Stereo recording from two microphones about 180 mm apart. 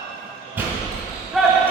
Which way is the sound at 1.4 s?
Centre (ahead or behind).